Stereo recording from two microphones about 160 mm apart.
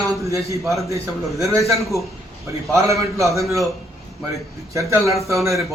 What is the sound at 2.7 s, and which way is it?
Speech, 20° right (ahead or behind).